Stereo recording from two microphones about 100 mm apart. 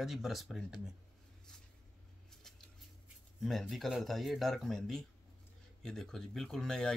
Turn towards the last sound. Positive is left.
turn(degrees=5)  # may be behind; listen again after turning